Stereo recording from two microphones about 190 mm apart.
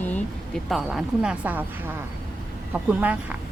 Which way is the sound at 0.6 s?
Centre (ahead or behind).